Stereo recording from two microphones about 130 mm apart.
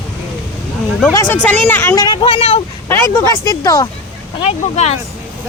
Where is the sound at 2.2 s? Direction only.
45° left (ahead or behind).